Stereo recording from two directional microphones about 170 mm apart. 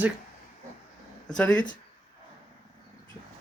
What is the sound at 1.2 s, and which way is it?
Speech, 5° left (ahead or behind).